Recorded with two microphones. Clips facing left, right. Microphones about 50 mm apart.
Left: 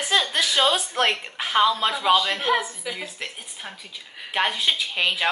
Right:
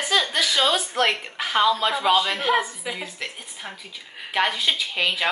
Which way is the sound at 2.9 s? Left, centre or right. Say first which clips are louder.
Right 1 dB; centre.